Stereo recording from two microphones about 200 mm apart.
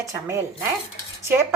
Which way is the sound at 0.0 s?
15° right (ahead or behind).